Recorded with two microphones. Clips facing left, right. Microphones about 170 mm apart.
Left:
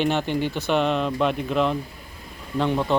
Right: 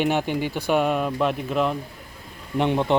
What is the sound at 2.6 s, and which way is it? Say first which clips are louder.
Speech: right 1 dB; 20° right (ahead or behind).